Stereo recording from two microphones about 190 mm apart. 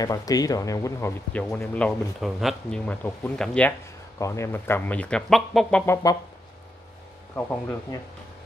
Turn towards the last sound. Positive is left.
turn(degrees=10)  # may be behind; listen again after turning